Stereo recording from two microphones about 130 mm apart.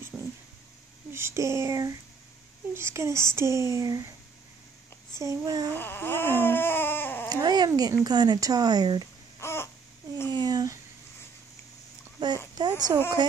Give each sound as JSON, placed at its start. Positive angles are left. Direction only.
{"t": 0.1, "sound": "vehicle", "side_deg": -10}
{"t": 1.1, "sound": "speech", "side_deg": -20}
{"t": 5.2, "sound": "speech", "side_deg": -25}
{"t": 5.7, "sound": "baby cry", "side_deg": 15}
{"t": 7.2, "sound": "speech", "side_deg": -30}
{"t": 9.4, "sound": "a sound", "side_deg": 20}
{"t": 10.3, "sound": "a sound", "side_deg": -30}
{"t": 12.5, "sound": "speech", "side_deg": -30}